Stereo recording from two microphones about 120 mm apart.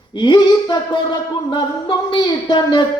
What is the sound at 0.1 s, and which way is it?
Speech, 40° left (ahead or behind).